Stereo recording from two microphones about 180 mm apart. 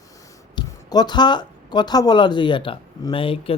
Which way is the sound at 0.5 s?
25° left (ahead or behind).